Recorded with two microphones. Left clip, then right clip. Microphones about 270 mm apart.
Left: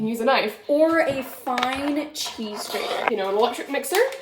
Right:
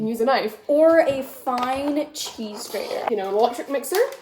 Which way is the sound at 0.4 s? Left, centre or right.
Centre.